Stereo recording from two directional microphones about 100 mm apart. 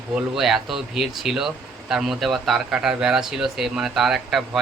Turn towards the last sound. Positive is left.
turn(degrees=0)  # may be behind; listen again after turning